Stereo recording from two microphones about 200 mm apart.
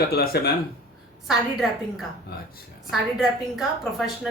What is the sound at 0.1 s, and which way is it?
Speech, 55° left (ahead or behind).